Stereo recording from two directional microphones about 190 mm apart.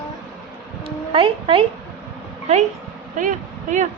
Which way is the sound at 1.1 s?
25° right (ahead or behind).